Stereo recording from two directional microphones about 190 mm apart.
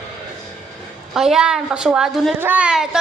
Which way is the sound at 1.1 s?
5° right (ahead or behind).